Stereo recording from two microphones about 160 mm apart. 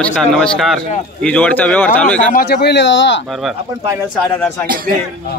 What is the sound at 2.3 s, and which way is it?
Speech, 90° left.